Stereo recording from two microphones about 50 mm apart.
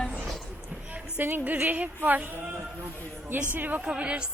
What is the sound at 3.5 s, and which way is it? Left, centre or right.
Speech, right.